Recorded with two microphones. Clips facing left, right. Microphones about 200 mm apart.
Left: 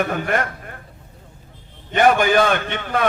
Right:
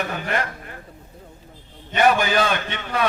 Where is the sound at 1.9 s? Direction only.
50° left (ahead or behind).